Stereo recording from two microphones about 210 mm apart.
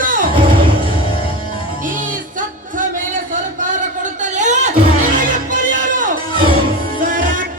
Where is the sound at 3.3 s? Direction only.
35° right (ahead or behind).